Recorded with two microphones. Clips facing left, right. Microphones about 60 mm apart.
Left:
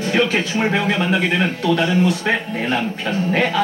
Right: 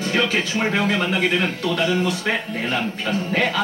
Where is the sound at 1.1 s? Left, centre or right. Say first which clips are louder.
Left 2 dB; left.